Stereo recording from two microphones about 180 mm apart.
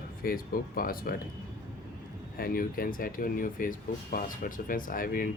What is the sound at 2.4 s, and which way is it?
Speech, 55° left (ahead or behind).